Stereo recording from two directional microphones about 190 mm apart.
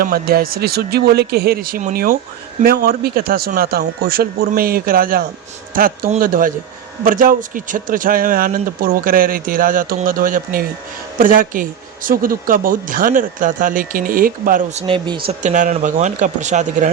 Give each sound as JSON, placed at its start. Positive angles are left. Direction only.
{"t": 0.0, "sound": "speech", "side_deg": -50}
{"t": 15.4, "sound": "speech", "side_deg": -40}